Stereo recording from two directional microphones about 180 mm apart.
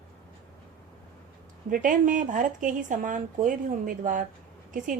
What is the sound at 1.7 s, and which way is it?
Speech, 50° right (ahead or behind).